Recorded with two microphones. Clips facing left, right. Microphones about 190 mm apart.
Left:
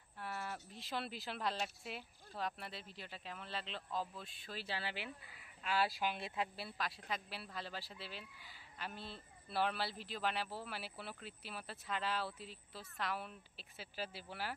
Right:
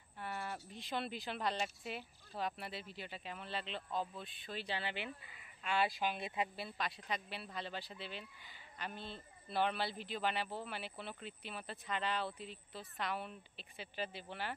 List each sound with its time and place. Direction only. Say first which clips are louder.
0.2 s speech: right 1 dB; centre (ahead or behind)